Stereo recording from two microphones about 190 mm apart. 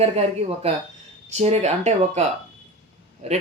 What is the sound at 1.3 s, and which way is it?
Speech, 35° right (ahead or behind).